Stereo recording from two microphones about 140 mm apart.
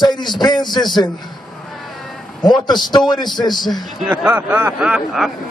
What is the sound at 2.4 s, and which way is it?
Speech, 30° left (ahead or behind).